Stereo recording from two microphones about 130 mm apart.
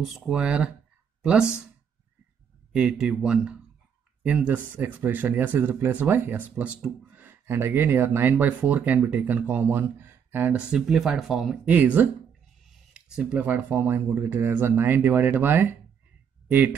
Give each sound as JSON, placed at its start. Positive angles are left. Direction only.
{"t": 0.3, "sound": "speech", "side_deg": -5}
{"t": 2.7, "sound": "speech", "side_deg": -10}